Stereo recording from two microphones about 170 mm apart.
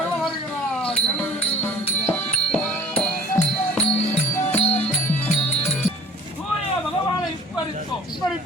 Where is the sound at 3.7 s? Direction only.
5° left (ahead or behind).